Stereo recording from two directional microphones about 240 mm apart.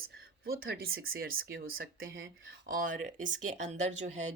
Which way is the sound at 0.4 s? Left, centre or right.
Right.